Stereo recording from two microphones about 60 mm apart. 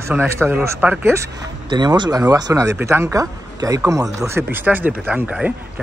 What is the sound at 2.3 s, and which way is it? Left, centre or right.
Speech, right.